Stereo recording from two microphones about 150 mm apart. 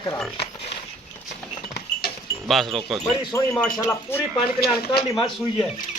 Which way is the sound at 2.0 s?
90° left.